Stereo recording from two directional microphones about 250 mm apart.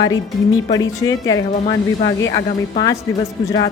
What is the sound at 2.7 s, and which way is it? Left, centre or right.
Speech, centre.